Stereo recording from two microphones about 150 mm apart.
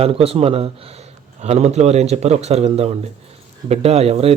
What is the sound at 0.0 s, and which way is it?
Speech, 40° right (ahead or behind).